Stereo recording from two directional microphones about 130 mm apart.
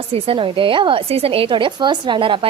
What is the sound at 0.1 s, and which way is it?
Speech, 40° right (ahead or behind).